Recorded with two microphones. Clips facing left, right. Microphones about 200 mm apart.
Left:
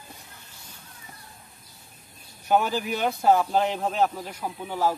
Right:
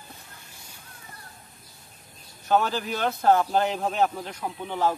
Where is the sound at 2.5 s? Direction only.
15° left (ahead or behind).